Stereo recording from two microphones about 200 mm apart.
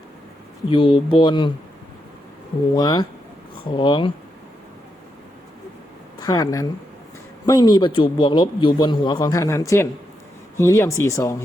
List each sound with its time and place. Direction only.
0.7 s a man's voice: 25° left (ahead or behind)
2.7 s a man's voice: 20° left (ahead or behind)
6.1 s a man's voice: 20° left (ahead or behind)